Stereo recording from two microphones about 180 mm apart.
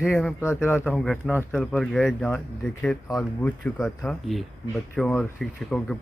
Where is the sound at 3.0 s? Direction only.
20° left (ahead or behind).